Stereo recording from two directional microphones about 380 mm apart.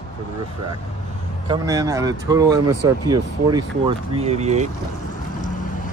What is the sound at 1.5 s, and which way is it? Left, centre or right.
Speech, centre.